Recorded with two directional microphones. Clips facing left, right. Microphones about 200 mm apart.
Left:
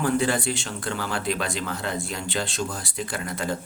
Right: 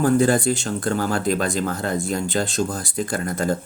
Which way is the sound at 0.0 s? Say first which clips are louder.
Right 6 dB; 45° right (ahead or behind).